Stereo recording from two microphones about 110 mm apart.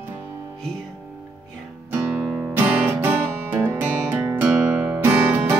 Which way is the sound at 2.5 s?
20° right (ahead or behind).